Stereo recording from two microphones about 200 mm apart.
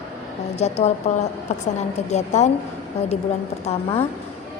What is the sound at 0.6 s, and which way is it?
Speech, 35° left (ahead or behind).